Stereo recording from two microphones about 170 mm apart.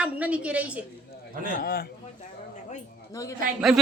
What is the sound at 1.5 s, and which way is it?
Speech, 60° left (ahead or behind).